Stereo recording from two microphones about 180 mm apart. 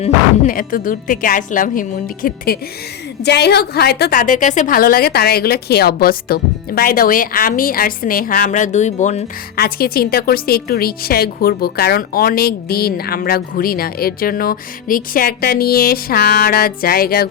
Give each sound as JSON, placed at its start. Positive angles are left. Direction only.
{"t": 0.0, "sound": "a woman's voice", "side_deg": 50}
{"t": 3.2, "sound": "a woman's voice", "side_deg": 65}
{"t": 9.6, "sound": "a woman's voice", "side_deg": 55}